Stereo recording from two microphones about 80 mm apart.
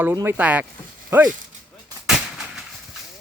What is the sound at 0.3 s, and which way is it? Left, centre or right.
Speech, centre.